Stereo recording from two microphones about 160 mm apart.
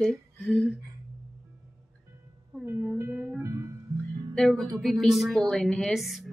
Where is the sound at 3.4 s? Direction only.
20° right (ahead or behind).